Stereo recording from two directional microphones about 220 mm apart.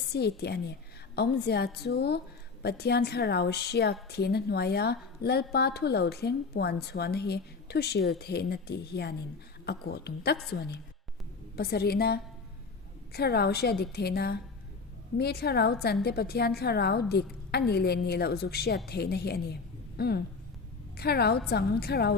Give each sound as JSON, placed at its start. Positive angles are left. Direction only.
{"t": 0.1, "sound": "a woman's voice", "side_deg": 50}